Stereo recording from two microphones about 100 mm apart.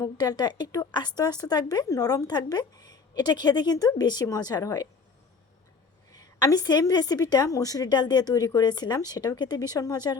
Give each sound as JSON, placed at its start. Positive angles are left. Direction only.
{"t": 0.2, "sound": "speech", "side_deg": 45}
{"t": 6.1, "sound": "speech", "side_deg": 40}